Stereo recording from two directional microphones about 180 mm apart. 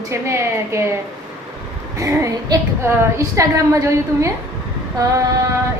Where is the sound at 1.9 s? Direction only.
20° right (ahead or behind).